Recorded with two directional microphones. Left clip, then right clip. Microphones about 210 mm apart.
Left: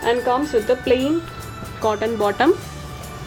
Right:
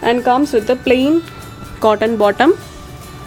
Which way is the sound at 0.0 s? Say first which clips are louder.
Right 5 dB; 55° right (ahead or behind).